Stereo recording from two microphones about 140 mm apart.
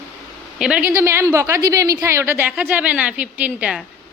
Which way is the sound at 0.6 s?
10° right (ahead or behind).